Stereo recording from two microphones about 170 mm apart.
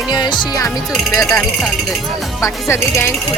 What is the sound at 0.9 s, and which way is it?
Speech, centre (ahead or behind).